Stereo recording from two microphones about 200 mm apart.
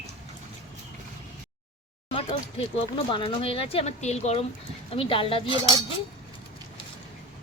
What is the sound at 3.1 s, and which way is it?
Speech, 25° left (ahead or behind).